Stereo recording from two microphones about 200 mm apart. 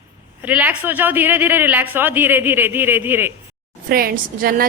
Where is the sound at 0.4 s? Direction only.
10° right (ahead or behind).